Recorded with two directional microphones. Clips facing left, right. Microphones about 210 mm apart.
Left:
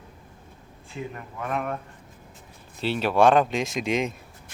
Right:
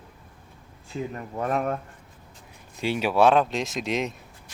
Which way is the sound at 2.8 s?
10° right (ahead or behind).